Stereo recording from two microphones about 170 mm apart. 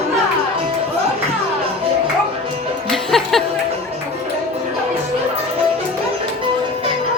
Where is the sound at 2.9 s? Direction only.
Centre (ahead or behind).